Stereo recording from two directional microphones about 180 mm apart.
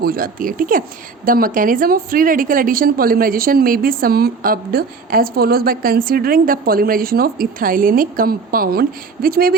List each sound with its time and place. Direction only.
0.0 s a woman's voice: 55° right (ahead or behind)